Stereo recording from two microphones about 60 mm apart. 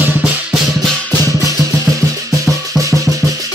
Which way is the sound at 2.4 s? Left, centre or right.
Right.